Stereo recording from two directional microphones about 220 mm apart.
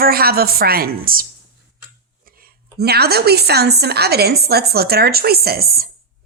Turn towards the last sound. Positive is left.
turn(degrees=-45)  # may be behind; listen again after turning